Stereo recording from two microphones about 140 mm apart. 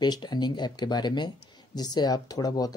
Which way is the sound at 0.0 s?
30° left (ahead or behind).